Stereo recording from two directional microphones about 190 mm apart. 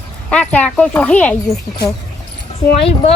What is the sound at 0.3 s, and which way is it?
Speech, 5° left (ahead or behind).